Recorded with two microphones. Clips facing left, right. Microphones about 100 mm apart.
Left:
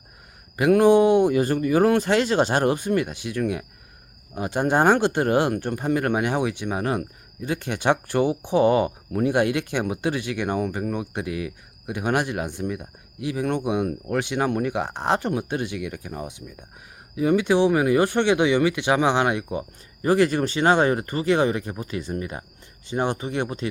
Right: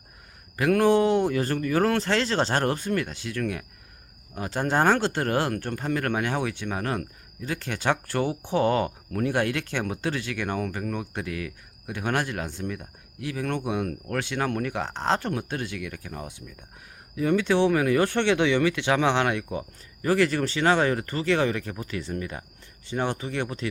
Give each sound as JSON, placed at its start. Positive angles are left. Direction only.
{"t": 0.5, "sound": "speech", "side_deg": 20}